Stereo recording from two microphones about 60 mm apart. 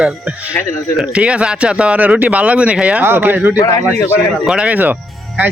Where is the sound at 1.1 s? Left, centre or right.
Centre.